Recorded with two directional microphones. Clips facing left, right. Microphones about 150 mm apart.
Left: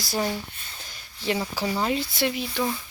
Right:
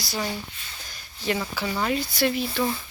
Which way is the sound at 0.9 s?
25° left (ahead or behind).